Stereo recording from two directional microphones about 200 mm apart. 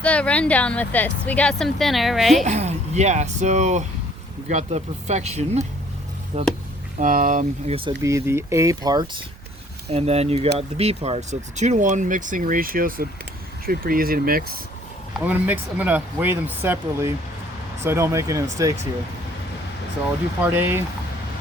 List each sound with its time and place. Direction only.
0.0 s speech: 5° left (ahead or behind)
2.4 s speech: 35° right (ahead or behind)
8.0 s speech: 15° right (ahead or behind)
9.9 s speech: 30° right (ahead or behind); by 14.4 s 45° right (ahead or behind)
15.2 s speech: 10° right (ahead or behind)
20.4 s speech: 10° right (ahead or behind)